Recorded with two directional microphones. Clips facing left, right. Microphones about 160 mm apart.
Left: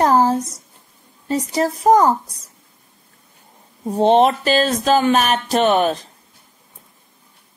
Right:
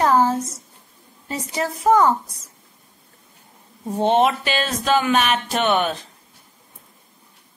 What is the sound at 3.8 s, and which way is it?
Speech, 35° left (ahead or behind).